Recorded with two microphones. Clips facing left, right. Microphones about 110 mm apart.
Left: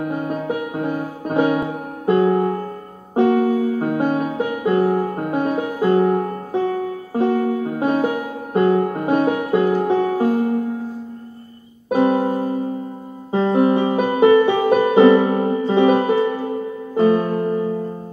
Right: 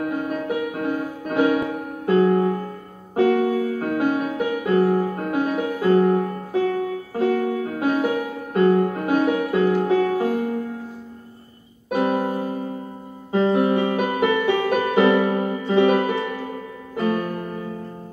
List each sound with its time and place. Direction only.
0.0 s music: 30° left (ahead or behind)
4.7 s music: 15° left (ahead or behind)
11.9 s music: 30° left (ahead or behind)
12.2 s music: 15° left (ahead or behind)
13.3 s music: 25° left (ahead or behind)